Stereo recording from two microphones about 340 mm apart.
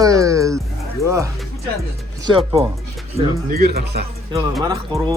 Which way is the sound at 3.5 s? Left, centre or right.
Right.